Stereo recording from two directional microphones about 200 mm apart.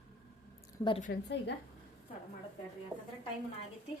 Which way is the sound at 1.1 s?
60° left (ahead or behind).